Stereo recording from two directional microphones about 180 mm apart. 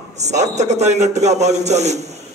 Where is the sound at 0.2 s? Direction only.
40° right (ahead or behind).